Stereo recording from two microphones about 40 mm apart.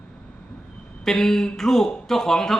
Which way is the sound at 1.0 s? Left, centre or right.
Centre.